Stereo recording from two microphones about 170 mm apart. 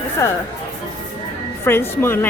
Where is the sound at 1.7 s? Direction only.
15° left (ahead or behind).